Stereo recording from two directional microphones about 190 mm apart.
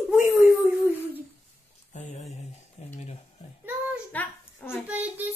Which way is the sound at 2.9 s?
35° left (ahead or behind).